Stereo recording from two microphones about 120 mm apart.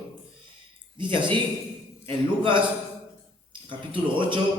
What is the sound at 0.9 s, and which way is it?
Speech, 40° right (ahead or behind).